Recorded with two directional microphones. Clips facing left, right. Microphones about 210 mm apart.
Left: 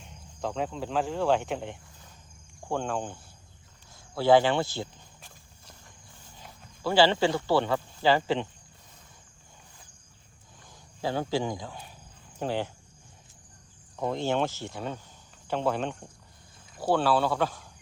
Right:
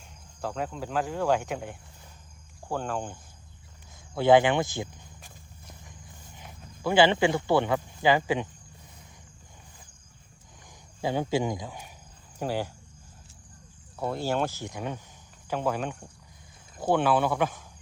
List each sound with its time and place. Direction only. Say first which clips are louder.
0.0 s speech: left 1 dB; 5° right (ahead or behind)
4.2 s walk: right 1 dB; 15° right (ahead or behind)
6.3 s speech: right 2 dB; 20° right (ahead or behind)
11.0 s speech: right 2 dB; 15° right (ahead or behind)
13.9 s speech: left 1 dB; 10° right (ahead or behind)